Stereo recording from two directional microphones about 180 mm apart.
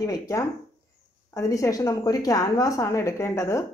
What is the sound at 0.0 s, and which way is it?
A woman's voice, 20° left (ahead or behind).